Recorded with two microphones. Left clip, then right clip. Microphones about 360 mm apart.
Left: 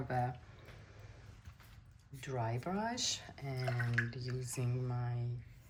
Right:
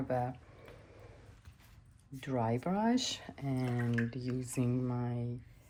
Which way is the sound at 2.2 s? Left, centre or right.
Centre.